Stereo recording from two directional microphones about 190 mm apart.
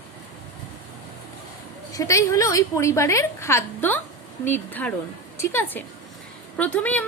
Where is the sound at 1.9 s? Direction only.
15° left (ahead or behind).